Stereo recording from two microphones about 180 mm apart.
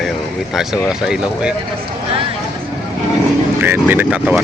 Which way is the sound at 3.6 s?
10° right (ahead or behind).